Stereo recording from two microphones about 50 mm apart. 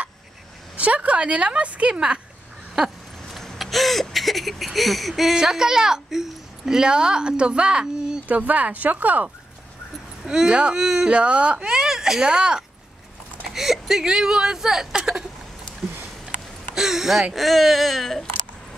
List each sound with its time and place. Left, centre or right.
0.7 s a woman's voice: right
3.3 s a sound: centre
5.3 s speech: centre
8.3 s speech: right
10.2 s speech: centre
11.1 s speech: right
16.7 s speech: centre